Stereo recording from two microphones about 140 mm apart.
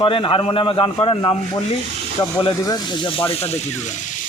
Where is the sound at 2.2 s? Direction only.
25° left (ahead or behind).